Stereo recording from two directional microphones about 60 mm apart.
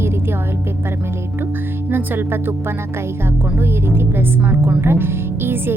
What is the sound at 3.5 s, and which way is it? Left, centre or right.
Speech, right.